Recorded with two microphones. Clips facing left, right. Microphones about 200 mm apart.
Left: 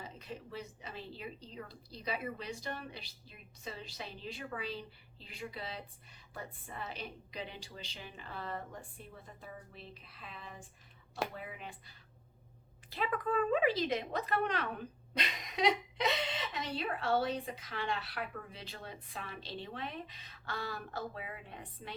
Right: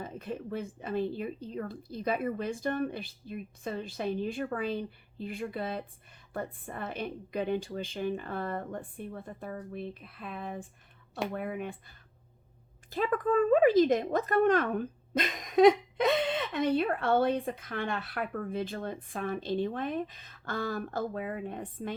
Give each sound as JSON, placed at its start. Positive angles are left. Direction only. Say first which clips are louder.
{"t": 0.0, "sound": "a woman's voice", "louder": "right 9 dB", "side_deg": -55}
{"t": 12.9, "sound": "speech", "louder": "right 7 dB", "side_deg": -45}